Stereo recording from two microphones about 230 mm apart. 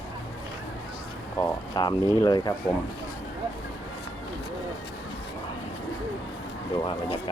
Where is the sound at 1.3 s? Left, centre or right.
Centre.